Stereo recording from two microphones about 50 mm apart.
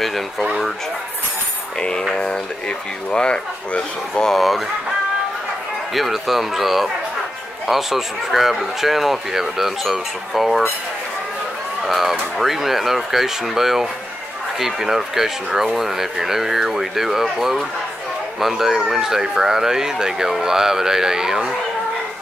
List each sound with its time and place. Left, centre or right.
0.0 s speech: centre
1.8 s speech: centre
3.1 s speech: centre
4.3 s a man's voice: centre
5.9 s a man's voice: centre
11.8 s a man's voice: centre